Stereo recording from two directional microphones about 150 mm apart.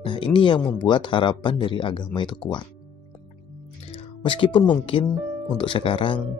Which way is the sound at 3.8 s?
35° left (ahead or behind).